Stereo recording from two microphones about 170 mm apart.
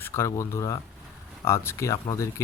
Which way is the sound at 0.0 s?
15° left (ahead or behind).